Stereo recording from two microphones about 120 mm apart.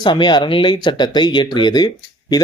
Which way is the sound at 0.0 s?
40° left (ahead or behind).